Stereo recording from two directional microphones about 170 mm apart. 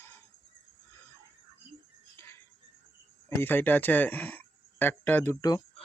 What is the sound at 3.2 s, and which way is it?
Speech, 10° left (ahead or behind).